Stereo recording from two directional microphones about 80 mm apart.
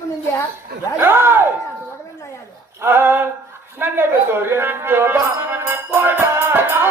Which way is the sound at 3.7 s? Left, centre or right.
Right.